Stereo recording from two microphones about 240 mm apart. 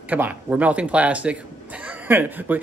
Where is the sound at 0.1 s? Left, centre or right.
Centre.